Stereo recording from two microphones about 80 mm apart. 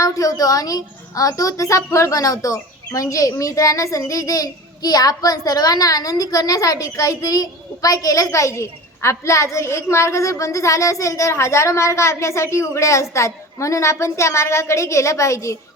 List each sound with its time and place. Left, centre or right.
0.0 s a woman's voice: left